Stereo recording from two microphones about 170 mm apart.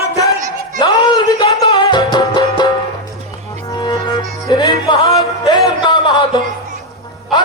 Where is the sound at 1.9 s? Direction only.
25° left (ahead or behind).